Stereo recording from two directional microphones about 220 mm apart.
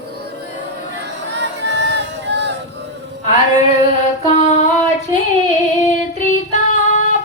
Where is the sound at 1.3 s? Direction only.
55° right (ahead or behind).